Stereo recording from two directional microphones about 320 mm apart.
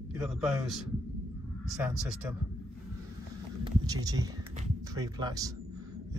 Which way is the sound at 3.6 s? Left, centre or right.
Centre.